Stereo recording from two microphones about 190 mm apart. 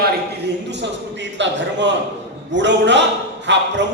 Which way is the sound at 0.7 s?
65° right (ahead or behind).